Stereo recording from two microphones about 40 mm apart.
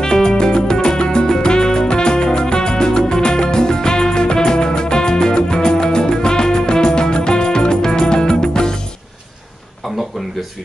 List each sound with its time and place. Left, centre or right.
0.0 s music: centre